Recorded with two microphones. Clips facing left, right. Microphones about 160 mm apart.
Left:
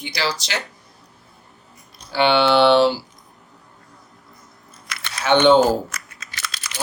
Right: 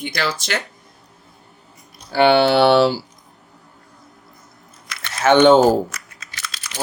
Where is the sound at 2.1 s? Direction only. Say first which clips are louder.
Right 3 dB; 45° right (ahead or behind).